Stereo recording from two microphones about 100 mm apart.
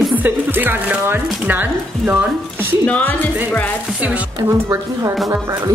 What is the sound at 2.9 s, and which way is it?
Speech, 15° left (ahead or behind).